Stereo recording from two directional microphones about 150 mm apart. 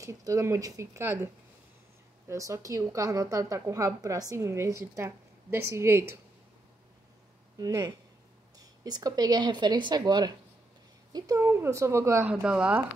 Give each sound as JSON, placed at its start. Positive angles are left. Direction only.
{"t": 0.0, "sound": "a woman's voice", "side_deg": -20}
{"t": 7.5, "sound": "a woman's voice", "side_deg": -25}